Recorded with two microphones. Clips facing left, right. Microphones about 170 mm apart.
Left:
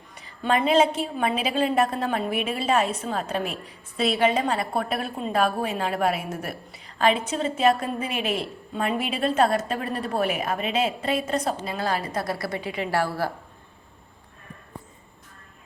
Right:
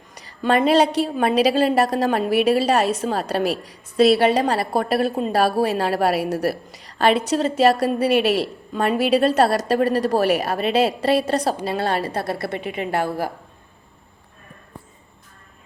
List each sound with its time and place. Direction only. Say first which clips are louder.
0.1 s a woman's voice: right 4 dB; 80° right
4.3 s a woman's voice: right 5 dB; 35° right (ahead or behind)
5.6 s a woman's voice: right 5 dB; 75° right (ahead or behind)
10.4 s a woman's voice: right 6 dB; 35° right (ahead or behind); by 13.3 s 20° right (ahead or behind)